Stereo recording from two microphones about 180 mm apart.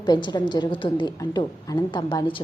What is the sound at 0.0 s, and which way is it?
A woman's voice, 25° left (ahead or behind).